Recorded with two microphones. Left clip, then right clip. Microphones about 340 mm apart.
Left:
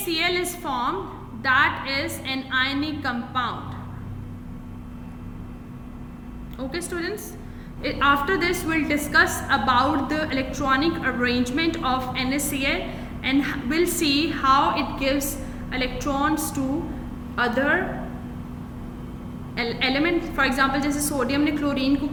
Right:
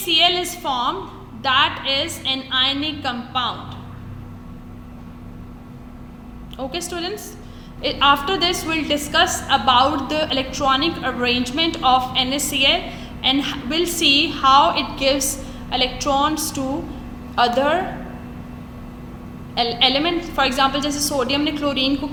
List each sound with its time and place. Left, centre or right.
0.1 s a woman's voice: centre
6.6 s a woman's voice: centre
19.5 s a woman's voice: centre